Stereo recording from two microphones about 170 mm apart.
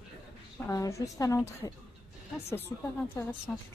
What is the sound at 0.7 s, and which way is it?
Speech, 20° left (ahead or behind).